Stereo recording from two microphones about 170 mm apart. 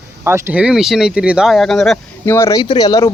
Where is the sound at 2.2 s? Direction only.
15° left (ahead or behind).